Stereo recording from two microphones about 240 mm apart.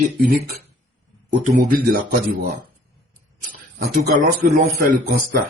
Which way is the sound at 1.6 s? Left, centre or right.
Right.